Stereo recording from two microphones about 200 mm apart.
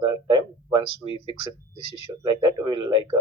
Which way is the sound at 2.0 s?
20° right (ahead or behind).